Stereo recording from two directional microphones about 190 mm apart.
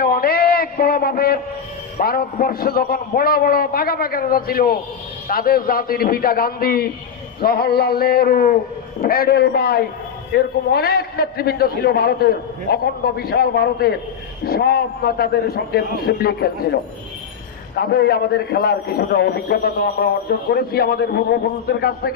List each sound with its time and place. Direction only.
0.0 s a sound: 50° left (ahead or behind)
2.0 s a man's voice: 50° left (ahead or behind)
17.7 s a man's voice: 55° left (ahead or behind)